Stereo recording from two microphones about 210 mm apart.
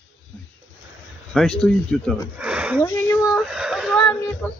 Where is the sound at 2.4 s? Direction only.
5° right (ahead or behind).